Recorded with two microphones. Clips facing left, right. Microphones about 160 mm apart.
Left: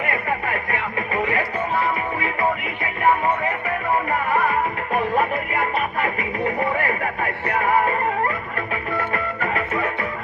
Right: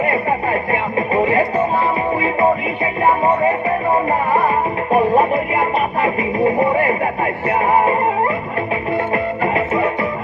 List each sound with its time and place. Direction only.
0.0 s music: 30° right (ahead or behind)
4.4 s music: 35° right (ahead or behind)
6.8 s a sound: 25° right (ahead or behind)
7.6 s music: 30° right (ahead or behind)